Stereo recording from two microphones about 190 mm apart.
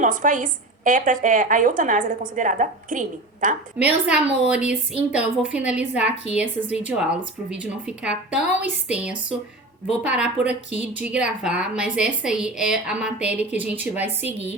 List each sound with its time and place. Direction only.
0.0 s a woman's voice: 45° right (ahead or behind)
3.8 s a woman's voice: 5° right (ahead or behind)
9.8 s a woman's voice: 5° right (ahead or behind)
10.7 s a woman's voice: 35° left (ahead or behind)
11.0 s a woman's voice: 5° right (ahead or behind)